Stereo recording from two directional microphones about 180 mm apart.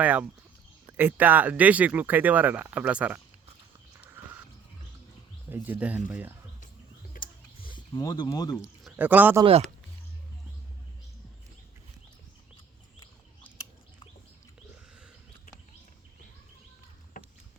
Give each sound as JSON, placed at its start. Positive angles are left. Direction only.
{"t": 0.0, "sound": "speech", "side_deg": -10}
{"t": 3.9, "sound": "a sound", "side_deg": -10}
{"t": 5.5, "sound": "speech", "side_deg": -10}
{"t": 7.2, "sound": "a sound", "side_deg": 25}
{"t": 8.8, "sound": "speech", "side_deg": -10}
{"t": 9.4, "sound": "speech", "side_deg": -35}
{"t": 17.2, "sound": "rowboat", "side_deg": 45}